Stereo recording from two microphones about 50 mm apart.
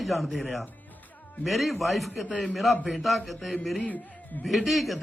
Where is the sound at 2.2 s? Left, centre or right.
Left.